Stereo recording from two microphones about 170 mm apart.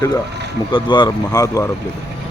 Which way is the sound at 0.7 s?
25° left (ahead or behind).